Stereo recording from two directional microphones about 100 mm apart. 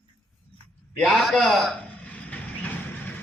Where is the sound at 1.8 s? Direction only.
15° left (ahead or behind).